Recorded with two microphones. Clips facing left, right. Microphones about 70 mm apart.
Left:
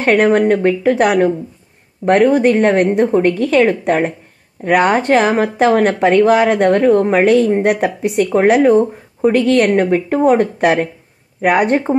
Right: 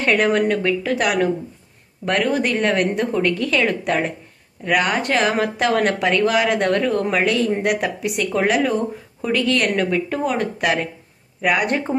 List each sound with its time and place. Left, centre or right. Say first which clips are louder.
0.0 s speech: left 6 dB; left